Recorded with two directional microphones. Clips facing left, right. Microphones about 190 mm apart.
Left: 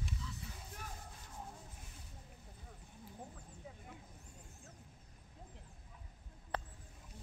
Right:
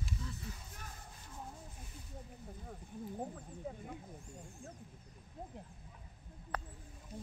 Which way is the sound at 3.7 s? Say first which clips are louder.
Right 10 dB; 50° right (ahead or behind).